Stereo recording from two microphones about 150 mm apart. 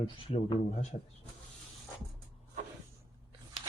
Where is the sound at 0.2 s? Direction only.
45° left (ahead or behind).